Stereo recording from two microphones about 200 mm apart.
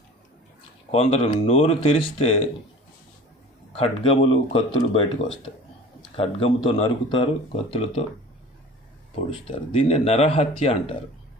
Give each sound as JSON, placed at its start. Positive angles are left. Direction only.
{"t": 0.9, "sound": "speech", "side_deg": 30}
{"t": 3.8, "sound": "speech", "side_deg": 30}
{"t": 6.1, "sound": "speech", "side_deg": 30}
{"t": 9.3, "sound": "speech", "side_deg": 30}